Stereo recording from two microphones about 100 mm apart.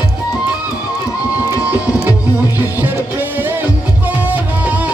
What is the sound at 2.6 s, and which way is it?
Music, 20° right (ahead or behind).